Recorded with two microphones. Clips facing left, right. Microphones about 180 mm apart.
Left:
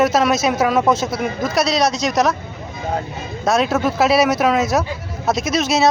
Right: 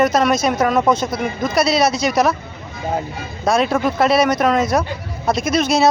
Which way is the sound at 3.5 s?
Centre (ahead or behind).